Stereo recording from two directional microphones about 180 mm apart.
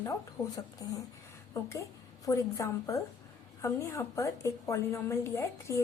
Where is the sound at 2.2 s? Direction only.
20° left (ahead or behind).